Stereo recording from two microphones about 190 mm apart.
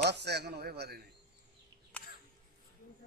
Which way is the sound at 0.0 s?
60° right (ahead or behind).